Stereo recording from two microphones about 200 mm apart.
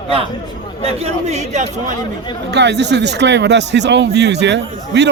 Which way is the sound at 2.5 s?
60° right (ahead or behind).